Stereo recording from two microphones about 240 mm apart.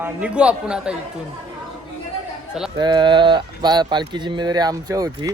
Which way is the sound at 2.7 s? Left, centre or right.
Centre.